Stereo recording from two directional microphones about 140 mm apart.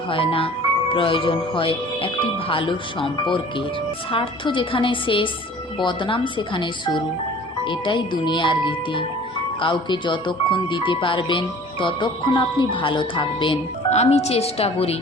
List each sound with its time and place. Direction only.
0.1 s speech: 40° left (ahead or behind)
4.1 s speech: 35° left (ahead or behind)
13.9 s a woman's voice: 50° left (ahead or behind)